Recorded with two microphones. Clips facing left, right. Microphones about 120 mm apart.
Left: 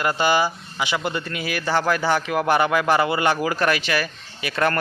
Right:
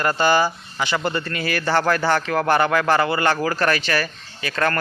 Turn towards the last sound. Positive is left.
turn(degrees=15)  # may be behind; listen again after turning